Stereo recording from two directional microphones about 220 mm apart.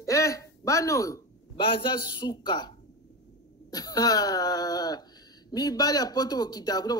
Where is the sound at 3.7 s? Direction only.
15° left (ahead or behind).